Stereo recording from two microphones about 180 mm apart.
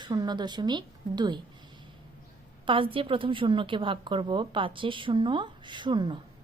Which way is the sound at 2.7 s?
30° right (ahead or behind).